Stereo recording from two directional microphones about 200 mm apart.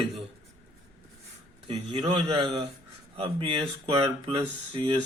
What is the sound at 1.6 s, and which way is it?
A man's voice, 25° right (ahead or behind).